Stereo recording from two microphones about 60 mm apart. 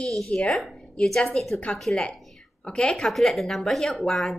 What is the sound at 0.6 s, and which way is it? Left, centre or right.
Speech, centre.